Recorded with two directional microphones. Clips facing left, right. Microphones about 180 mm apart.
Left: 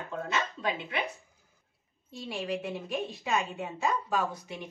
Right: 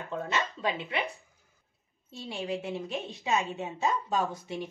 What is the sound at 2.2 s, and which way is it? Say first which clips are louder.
A woman's voice: even; 25° right (ahead or behind).